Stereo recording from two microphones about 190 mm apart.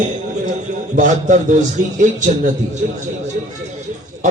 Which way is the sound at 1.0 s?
40° right (ahead or behind).